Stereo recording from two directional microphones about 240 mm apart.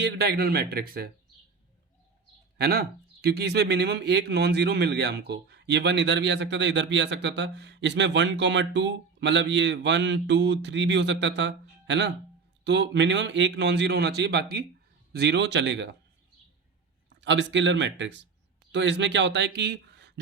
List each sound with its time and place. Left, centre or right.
0.0 s speech: right
2.6 s speech: right
17.2 s speech: right